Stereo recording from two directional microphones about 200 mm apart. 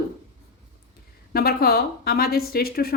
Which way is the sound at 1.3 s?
50° left (ahead or behind).